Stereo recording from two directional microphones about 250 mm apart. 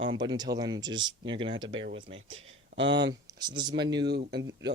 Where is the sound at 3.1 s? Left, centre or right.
Centre.